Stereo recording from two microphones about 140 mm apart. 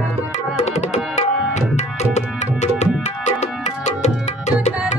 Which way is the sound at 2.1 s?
55° left (ahead or behind).